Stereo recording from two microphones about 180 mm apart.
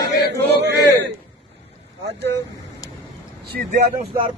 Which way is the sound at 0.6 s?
65° right (ahead or behind).